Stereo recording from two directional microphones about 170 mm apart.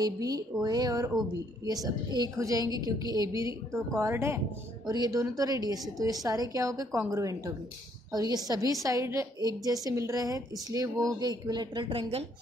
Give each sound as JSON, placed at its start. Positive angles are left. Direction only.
{"t": 0.0, "sound": "a woman's voice", "side_deg": -20}